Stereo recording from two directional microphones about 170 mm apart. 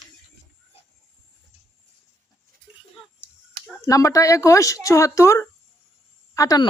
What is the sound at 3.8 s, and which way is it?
Speech, 20° left (ahead or behind).